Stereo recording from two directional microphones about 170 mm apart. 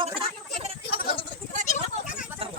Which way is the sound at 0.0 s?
30° right (ahead or behind).